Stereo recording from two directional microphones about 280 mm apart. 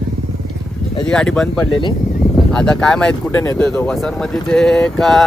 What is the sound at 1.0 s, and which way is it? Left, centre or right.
Speech, centre.